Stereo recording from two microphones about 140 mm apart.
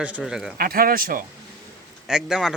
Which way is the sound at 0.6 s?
90° right.